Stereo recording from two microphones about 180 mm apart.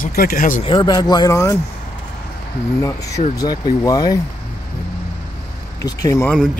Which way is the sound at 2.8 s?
20° left (ahead or behind).